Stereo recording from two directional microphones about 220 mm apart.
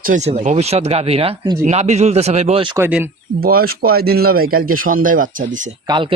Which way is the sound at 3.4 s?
45° right (ahead or behind).